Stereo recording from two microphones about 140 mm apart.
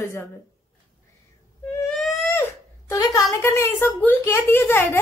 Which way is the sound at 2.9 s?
25° left (ahead or behind).